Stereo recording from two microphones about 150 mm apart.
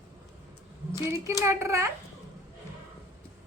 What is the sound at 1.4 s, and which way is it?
Speech, 20° right (ahead or behind).